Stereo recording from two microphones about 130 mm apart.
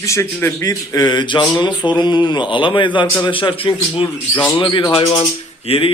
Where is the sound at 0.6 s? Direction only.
30° left (ahead or behind).